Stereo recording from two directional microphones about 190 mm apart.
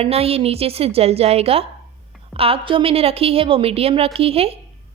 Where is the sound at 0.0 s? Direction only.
30° right (ahead or behind).